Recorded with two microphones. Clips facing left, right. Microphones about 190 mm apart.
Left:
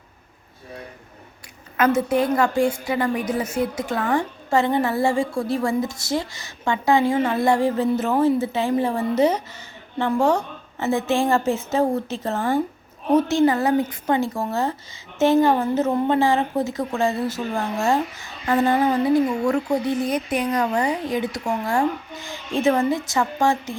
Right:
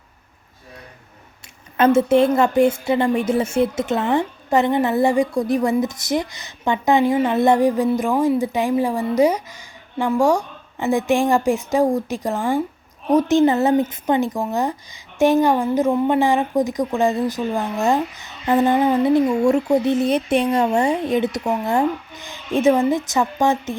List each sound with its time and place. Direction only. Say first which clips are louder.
1.7 s a woman's voice: right 5 dB; 30° right (ahead or behind)